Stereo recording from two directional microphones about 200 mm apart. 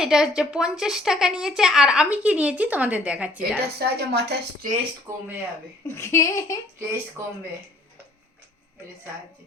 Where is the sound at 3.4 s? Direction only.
50° right (ahead or behind).